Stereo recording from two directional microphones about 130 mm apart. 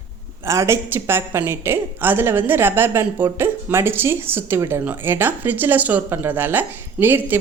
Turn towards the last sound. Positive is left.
turn(degrees=-15)  # may be behind; listen again after turning